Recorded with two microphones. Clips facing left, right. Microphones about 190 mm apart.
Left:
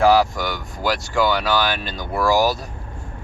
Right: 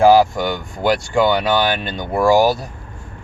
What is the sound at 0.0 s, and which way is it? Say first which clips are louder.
Speech: right 4 dB; 25° right (ahead or behind).